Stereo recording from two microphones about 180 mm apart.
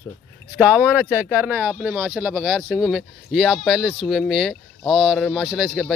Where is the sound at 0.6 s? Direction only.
10° right (ahead or behind).